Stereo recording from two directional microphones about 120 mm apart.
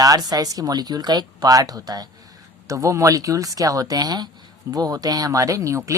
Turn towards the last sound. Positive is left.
turn(degrees=-25)  # may be behind; listen again after turning